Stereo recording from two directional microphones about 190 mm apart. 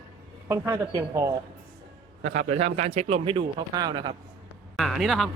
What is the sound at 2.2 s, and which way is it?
A man's voice, 40° right (ahead or behind).